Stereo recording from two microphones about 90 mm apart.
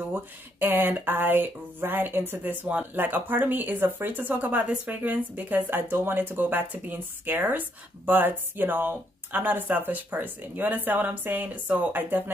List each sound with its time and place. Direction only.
0.1 s speech: 20° right (ahead or behind)